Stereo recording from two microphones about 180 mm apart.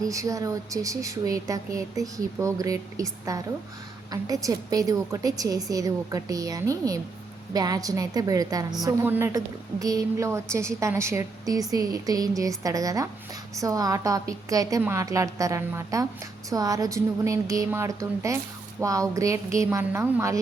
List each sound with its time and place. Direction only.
0.0 s a woman's voice: 20° right (ahead or behind)